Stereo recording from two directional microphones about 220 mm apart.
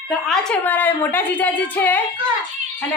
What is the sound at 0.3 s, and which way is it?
A woman's voice, 5° left (ahead or behind).